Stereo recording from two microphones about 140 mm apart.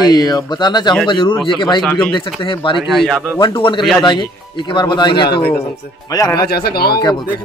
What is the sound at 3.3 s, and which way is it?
Speech, 35° left (ahead or behind).